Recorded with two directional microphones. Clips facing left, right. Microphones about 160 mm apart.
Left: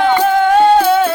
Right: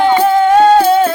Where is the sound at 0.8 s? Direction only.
35° right (ahead or behind).